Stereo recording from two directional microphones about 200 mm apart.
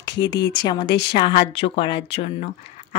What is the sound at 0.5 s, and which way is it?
Speech, 20° left (ahead or behind).